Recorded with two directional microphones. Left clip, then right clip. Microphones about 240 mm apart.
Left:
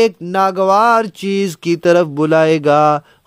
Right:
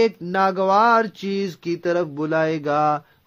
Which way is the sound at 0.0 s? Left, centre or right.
Left.